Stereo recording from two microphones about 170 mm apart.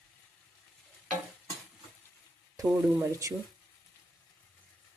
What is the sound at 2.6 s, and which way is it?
Speech, 20° right (ahead or behind).